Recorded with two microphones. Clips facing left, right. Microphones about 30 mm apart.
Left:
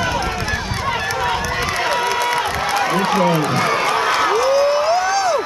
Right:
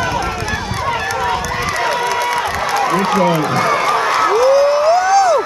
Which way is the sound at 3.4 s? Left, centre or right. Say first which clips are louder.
Right 2 dB; centre.